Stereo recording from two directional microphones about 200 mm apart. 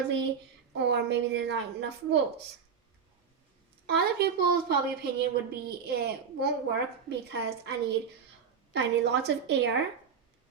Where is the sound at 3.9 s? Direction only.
50° right (ahead or behind).